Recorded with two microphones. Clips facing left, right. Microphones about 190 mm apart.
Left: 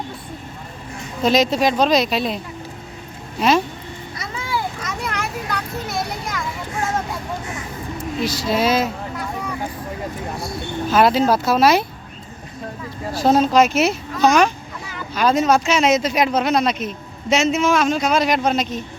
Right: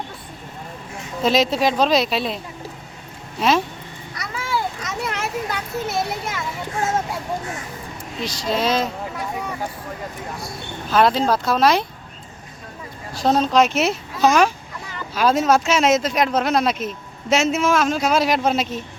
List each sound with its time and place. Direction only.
1.2 s speech: centre (ahead or behind)
4.2 s a sound: 15° left (ahead or behind)
4.8 s children playing: centre (ahead or behind)
8.2 s speech: 5° left (ahead or behind)
10.9 s speech: 5° left (ahead or behind)
13.2 s speech: 5° left (ahead or behind)